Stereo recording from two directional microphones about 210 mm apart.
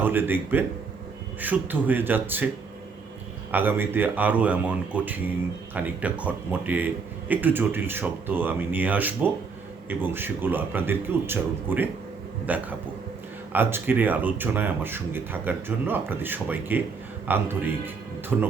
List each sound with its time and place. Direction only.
0.0 s speech: 10° right (ahead or behind)
3.5 s speech: 10° right (ahead or behind)